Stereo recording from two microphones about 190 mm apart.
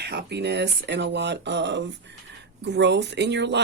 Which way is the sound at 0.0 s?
60° right (ahead or behind).